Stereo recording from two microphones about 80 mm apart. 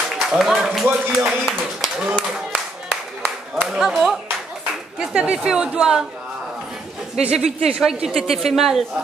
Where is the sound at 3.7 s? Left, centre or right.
Centre.